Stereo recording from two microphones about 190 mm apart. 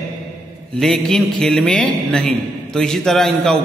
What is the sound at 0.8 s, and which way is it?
A man's voice, centre (ahead or behind).